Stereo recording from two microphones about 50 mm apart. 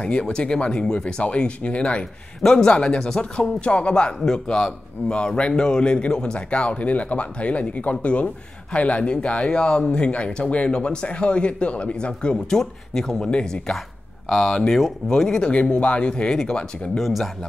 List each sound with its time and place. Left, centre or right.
0.0 s speech: left
15.5 s speech: left
17.0 s speech: centre